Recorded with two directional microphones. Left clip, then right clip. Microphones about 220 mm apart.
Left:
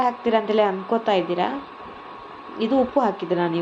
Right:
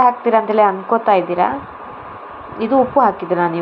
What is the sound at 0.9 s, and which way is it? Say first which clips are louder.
Speech: right 7 dB; centre (ahead or behind).